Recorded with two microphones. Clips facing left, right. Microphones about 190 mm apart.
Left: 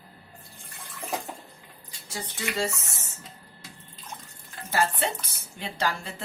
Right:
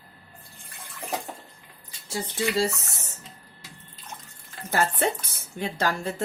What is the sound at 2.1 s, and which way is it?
Speech, 30° right (ahead or behind).